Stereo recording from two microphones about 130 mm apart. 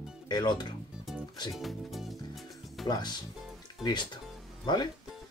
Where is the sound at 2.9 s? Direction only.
30° left (ahead or behind).